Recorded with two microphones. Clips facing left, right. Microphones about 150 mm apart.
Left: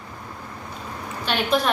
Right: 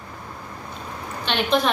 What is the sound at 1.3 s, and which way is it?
Speech, 5° left (ahead or behind).